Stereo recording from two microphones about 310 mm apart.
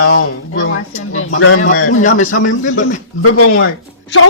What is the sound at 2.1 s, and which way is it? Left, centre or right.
Speech, left.